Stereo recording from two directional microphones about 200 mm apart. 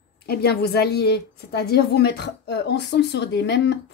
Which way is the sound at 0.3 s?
55° left (ahead or behind).